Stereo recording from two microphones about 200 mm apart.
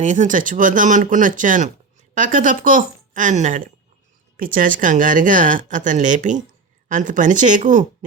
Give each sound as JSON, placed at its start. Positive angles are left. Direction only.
{"t": 0.0, "sound": "speech", "side_deg": -40}